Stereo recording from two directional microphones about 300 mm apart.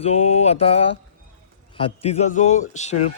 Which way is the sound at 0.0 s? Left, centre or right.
Left.